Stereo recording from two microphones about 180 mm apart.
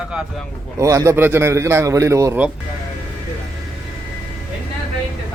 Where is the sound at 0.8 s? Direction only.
15° right (ahead or behind).